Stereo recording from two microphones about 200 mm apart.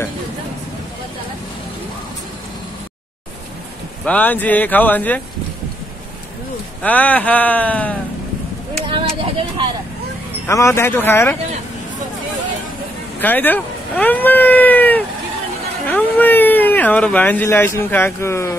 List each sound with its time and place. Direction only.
4.0 s speech: 10° left (ahead or behind)
6.8 s speech: 10° left (ahead or behind)
10.4 s speech: 15° left (ahead or behind)
13.2 s speech: 10° left (ahead or behind)